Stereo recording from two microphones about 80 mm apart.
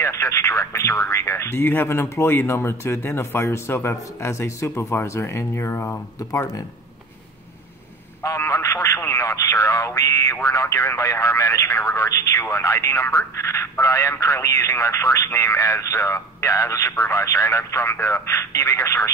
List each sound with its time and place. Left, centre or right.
0.0 s speech: left
8.2 s a sound: left
10.4 s speech: left